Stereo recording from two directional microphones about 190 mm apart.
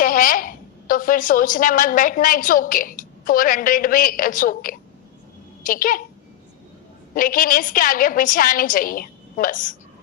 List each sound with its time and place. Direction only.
0.0 s a woman's voice: 45° left (ahead or behind)
7.1 s a woman's voice: 45° left (ahead or behind)